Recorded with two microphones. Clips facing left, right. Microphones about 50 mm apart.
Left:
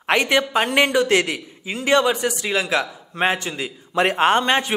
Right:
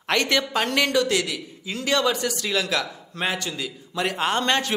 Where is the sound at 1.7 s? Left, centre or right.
Left.